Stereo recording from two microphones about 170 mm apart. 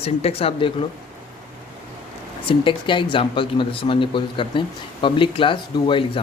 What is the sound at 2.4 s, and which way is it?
Speech, 30° left (ahead or behind).